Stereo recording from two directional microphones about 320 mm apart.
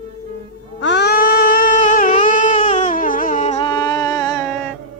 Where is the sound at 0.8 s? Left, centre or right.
Left; by 4.4 s centre.